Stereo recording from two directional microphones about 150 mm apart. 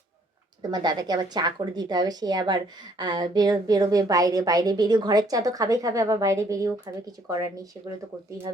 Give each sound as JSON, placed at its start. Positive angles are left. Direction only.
{"t": 0.7, "sound": "a woman's voice", "side_deg": -25}